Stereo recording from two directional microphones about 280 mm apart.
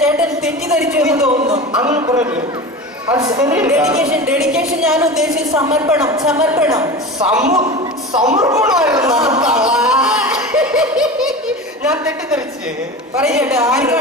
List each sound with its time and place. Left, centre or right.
0.0 s speech: centre
1.3 s a woman's voice: right
9.3 s laughter: centre
11.9 s speech: centre